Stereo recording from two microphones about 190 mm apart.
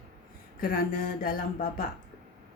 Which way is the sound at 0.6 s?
50° left (ahead or behind).